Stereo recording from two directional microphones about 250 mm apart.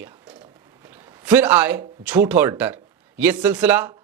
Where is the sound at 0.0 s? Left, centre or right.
Centre.